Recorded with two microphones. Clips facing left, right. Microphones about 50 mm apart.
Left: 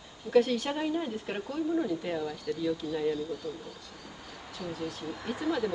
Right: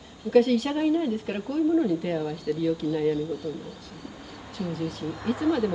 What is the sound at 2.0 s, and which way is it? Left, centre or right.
Speech, centre.